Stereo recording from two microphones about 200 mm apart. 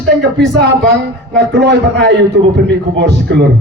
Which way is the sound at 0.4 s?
60° right (ahead or behind).